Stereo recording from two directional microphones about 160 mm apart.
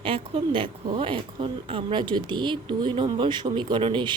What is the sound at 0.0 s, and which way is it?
Speech, 35° right (ahead or behind).